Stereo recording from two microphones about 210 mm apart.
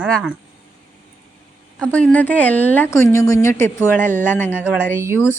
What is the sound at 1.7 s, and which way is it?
Speech, 5° left (ahead or behind).